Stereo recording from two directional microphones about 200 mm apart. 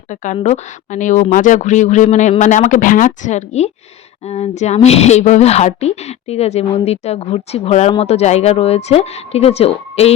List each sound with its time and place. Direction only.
0.1 s a woman's voice: 35° left (ahead or behind)